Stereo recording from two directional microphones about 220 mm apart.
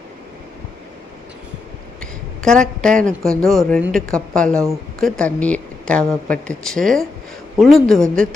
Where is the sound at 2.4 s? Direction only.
5° left (ahead or behind).